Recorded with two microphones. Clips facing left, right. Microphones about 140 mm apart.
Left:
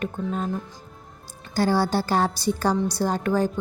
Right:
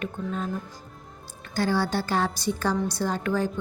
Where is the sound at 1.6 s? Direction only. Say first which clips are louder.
Left 3 dB; 35° left (ahead or behind).